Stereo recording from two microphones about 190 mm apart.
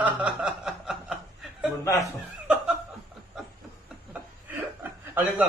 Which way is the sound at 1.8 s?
15° left (ahead or behind).